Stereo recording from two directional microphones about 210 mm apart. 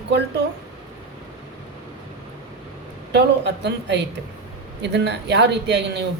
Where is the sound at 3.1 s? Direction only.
55° right (ahead or behind).